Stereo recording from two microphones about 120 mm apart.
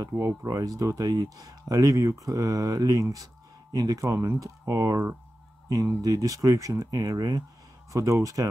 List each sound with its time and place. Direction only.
0.0 s speech: 25° right (ahead or behind)